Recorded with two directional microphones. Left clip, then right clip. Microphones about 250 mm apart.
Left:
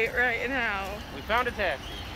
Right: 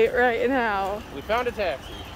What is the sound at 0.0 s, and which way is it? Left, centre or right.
Speech, right.